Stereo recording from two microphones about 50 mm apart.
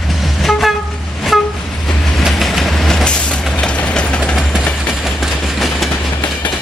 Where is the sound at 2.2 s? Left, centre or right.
Centre.